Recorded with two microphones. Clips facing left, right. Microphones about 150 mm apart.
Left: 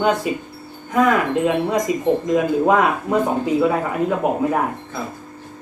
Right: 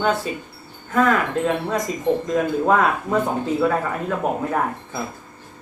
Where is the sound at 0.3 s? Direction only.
15° left (ahead or behind).